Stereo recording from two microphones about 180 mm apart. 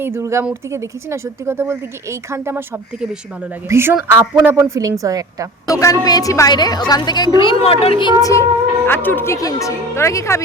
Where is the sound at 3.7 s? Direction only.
15° right (ahead or behind).